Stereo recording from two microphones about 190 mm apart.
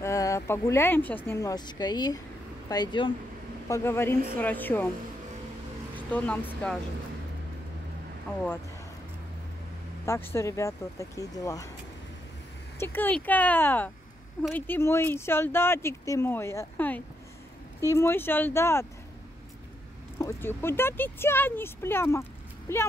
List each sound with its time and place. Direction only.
0.0 s speech: 15° left (ahead or behind)
5.9 s speech: 10° left (ahead or behind)
10.0 s speech: 15° left (ahead or behind)
12.7 s speech: 10° left (ahead or behind)
20.2 s speech: 15° left (ahead or behind)